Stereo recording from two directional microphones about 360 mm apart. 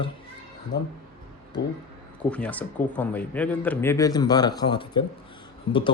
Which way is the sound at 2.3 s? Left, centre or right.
Centre.